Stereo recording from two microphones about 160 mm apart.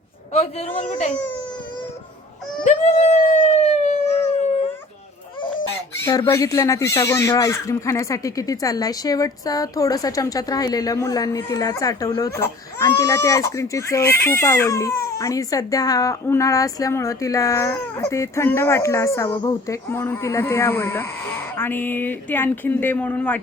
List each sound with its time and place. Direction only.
0.3 s speech: 40° left (ahead or behind)
2.6 s dog: 45° left (ahead or behind)
6.0 s speech: 15° left (ahead or behind)